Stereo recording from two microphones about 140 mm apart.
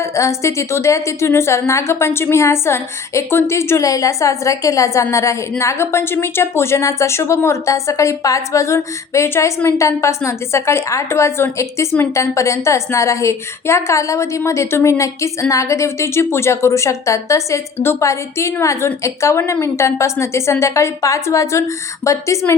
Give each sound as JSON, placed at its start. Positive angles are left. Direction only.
{"t": 0.0, "sound": "a woman's voice", "side_deg": 20}